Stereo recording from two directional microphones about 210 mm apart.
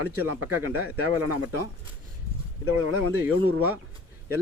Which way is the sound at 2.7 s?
90° right.